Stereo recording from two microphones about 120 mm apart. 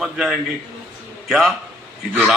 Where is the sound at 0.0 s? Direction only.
Centre (ahead or behind).